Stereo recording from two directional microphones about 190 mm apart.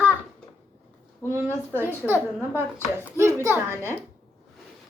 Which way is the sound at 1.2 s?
10° right (ahead or behind).